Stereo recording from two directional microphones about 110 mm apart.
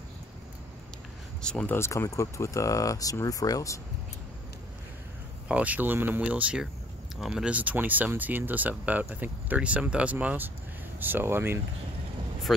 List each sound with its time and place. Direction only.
1.4 s speech: 10° left (ahead or behind)
1.8 s speech: 25° left (ahead or behind)
5.5 s speech: 15° right (ahead or behind)
12.5 s speech: centre (ahead or behind)